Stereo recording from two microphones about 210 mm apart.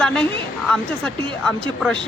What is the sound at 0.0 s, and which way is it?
A woman's voice, 5° left (ahead or behind).